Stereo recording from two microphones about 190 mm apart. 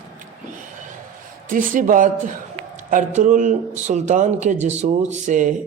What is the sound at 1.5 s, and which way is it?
Speech, 45° right (ahead or behind).